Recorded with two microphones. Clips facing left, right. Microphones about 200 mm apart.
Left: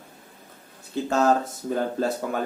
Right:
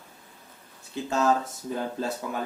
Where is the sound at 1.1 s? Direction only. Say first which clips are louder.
Left 3 dB; 55° left (ahead or behind).